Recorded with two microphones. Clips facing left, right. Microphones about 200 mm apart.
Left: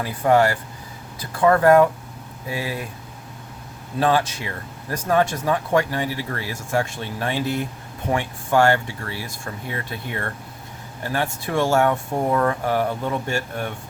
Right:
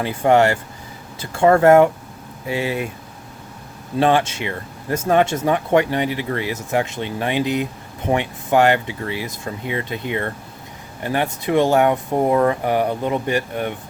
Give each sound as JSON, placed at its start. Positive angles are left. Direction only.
{"t": 0.0, "sound": "speech", "side_deg": -25}
{"t": 4.0, "sound": "speech", "side_deg": -25}